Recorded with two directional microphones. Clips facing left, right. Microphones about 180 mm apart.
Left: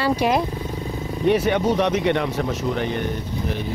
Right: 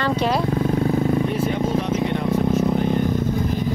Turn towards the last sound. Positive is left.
turn(degrees=80)